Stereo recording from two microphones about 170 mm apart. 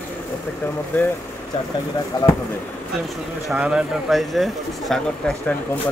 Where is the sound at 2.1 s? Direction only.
25° left (ahead or behind).